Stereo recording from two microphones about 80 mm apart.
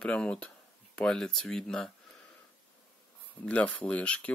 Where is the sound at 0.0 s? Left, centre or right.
Centre.